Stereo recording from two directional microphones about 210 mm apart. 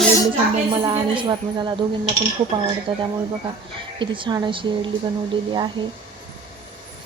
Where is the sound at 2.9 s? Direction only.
25° right (ahead or behind).